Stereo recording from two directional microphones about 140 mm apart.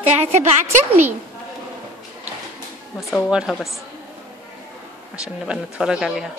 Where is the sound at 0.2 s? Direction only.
55° right (ahead or behind).